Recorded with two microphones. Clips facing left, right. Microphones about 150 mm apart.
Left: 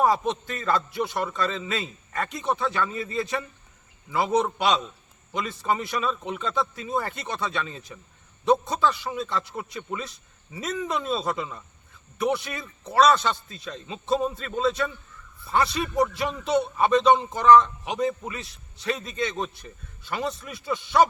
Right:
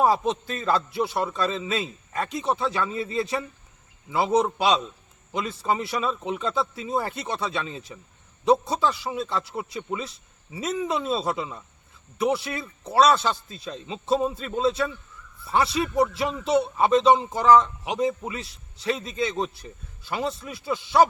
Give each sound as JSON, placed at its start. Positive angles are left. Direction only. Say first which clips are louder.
{"t": 0.0, "sound": "a man's voice", "louder": "right 1 dB", "side_deg": -30}
{"t": 15.5, "sound": "speech", "louder": "right 1 dB", "side_deg": -5}
{"t": 16.1, "sound": "speech", "louder": "right 2 dB", "side_deg": -30}